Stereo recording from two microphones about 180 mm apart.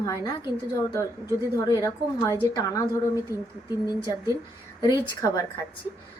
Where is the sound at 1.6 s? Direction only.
20° left (ahead or behind).